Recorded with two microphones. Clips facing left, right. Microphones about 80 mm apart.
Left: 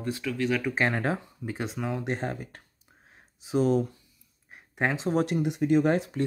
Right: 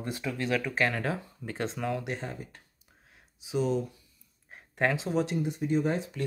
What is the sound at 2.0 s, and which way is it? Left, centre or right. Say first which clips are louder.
Speech: left 5 dB; left.